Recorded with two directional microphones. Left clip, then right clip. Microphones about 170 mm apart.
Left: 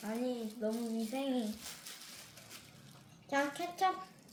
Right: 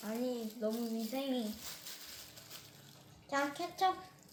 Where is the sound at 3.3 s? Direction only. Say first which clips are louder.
Left 1 dB; 20° left (ahead or behind).